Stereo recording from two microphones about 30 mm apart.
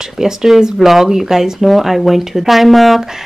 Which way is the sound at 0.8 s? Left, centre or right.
Centre.